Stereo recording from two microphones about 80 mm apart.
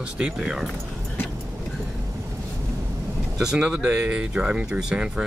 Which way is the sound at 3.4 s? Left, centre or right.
Centre.